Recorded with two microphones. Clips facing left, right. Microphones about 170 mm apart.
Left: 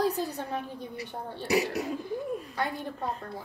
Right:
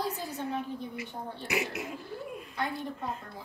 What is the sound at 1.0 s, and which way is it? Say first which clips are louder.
Speech: left 2 dB; 35° left (ahead or behind).